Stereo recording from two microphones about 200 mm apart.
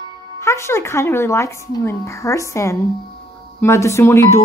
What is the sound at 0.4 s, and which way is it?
A child's voice, 15° left (ahead or behind).